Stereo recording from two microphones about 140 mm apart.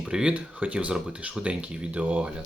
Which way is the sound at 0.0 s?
5° right (ahead or behind).